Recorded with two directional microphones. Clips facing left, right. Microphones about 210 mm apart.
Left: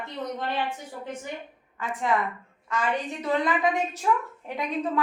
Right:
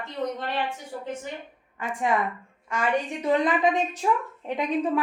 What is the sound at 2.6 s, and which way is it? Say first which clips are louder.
A woman's voice: right 2 dB; 15° right (ahead or behind).